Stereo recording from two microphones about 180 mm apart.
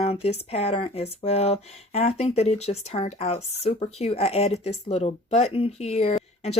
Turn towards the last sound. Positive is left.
turn(degrees=35)  # may be behind; listen again after turning